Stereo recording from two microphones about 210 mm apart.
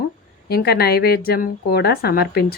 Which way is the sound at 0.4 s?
50° left (ahead or behind).